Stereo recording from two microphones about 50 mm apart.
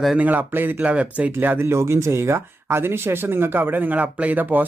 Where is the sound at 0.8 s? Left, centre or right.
Right.